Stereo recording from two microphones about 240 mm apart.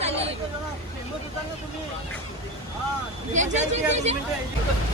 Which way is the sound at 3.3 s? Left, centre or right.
Right.